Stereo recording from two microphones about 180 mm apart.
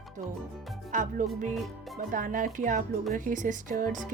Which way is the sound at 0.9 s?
45° right (ahead or behind).